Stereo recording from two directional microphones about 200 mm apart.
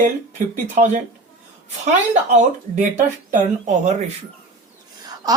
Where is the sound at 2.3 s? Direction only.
40° right (ahead or behind).